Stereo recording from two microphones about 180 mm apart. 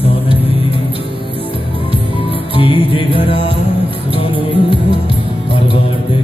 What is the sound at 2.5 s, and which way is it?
Music, 30° left (ahead or behind).